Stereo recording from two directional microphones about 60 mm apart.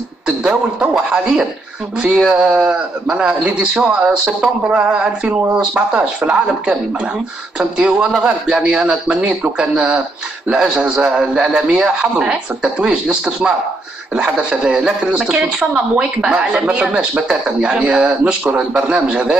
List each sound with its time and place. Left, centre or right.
0.3 s speech: centre
18.4 s a man's voice: right